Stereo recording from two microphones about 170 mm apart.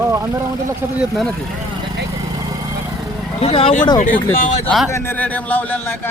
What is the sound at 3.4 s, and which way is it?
Speech, 35° left (ahead or behind).